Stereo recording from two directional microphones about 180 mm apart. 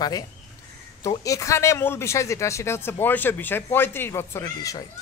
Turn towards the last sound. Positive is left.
turn(degrees=20)  # may be behind; listen again after turning